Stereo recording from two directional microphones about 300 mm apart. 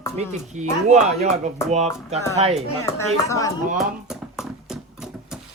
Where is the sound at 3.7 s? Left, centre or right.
Centre.